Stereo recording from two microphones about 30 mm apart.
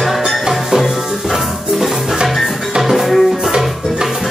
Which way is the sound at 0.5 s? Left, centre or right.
Centre.